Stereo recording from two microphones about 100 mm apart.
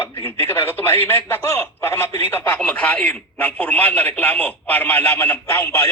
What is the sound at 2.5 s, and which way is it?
A man's voice, 10° left (ahead or behind).